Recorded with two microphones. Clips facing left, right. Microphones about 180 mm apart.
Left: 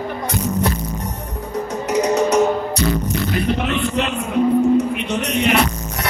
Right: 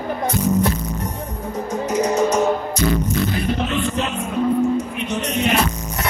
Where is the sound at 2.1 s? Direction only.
70° left (ahead or behind).